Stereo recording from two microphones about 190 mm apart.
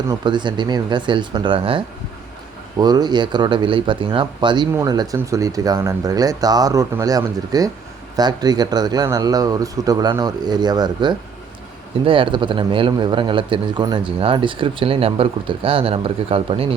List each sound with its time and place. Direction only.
0.1 s speech: 25° right (ahead or behind)